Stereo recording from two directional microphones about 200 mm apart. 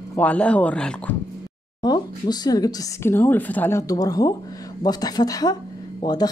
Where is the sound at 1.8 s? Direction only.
20° left (ahead or behind).